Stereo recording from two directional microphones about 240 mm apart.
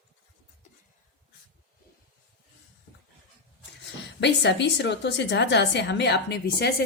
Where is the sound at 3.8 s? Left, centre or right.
Left.